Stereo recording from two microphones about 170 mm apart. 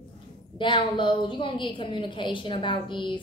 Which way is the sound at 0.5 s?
30° left (ahead or behind).